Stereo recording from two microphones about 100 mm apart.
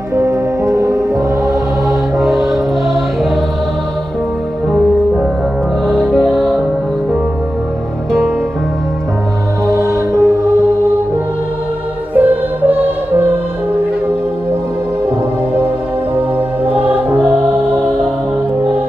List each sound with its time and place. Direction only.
0.1 s music: 30° right (ahead or behind)
1.9 s music: centre (ahead or behind)
5.9 s music: 10° right (ahead or behind)
6.1 s music: 5° left (ahead or behind)
9.7 s music: 30° right (ahead or behind)
12.2 s music: 15° right (ahead or behind)